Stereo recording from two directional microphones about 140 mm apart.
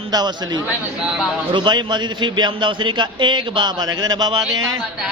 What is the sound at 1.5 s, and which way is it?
A man's voice, 35° right (ahead or behind).